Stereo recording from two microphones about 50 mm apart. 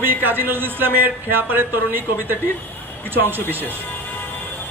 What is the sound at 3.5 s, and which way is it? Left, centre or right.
Speech, left.